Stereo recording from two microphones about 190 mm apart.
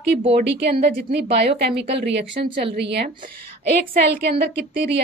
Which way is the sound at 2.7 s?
60° right (ahead or behind).